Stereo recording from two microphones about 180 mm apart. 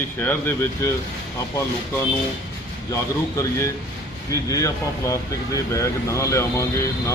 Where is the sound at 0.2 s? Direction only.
15° left (ahead or behind).